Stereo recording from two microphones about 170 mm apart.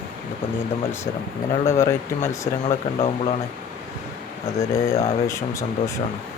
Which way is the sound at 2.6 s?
35° left (ahead or behind).